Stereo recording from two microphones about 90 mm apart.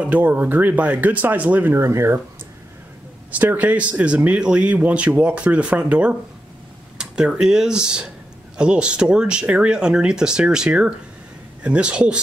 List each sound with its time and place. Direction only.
0.0 s speech: 20° right (ahead or behind)
1.7 s speech: 30° right (ahead or behind)
3.3 s speech: 20° right (ahead or behind)